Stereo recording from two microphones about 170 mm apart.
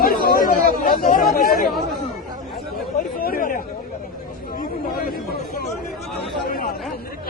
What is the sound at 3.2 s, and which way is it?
Chatter, 55° left (ahead or behind).